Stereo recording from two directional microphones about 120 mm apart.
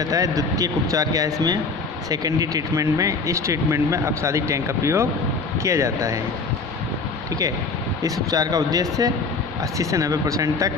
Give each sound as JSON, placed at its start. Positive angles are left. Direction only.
{"t": 0.0, "sound": "speech", "side_deg": -30}
{"t": 8.0, "sound": "speech", "side_deg": -30}